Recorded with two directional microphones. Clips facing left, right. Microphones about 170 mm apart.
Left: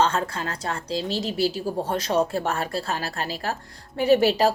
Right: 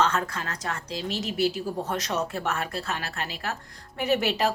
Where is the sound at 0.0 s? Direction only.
30° left (ahead or behind).